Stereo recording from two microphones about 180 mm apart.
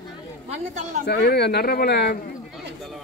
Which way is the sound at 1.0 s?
65° left (ahead or behind).